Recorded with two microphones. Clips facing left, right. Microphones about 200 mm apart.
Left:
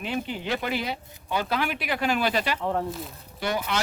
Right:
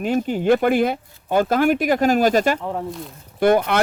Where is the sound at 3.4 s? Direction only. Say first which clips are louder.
Right 11 dB; 55° right (ahead or behind).